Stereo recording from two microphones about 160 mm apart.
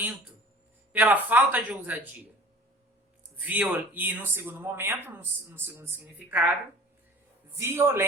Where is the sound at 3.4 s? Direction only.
10° right (ahead or behind).